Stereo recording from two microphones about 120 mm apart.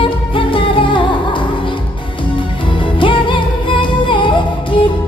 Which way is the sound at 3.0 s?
45° left (ahead or behind).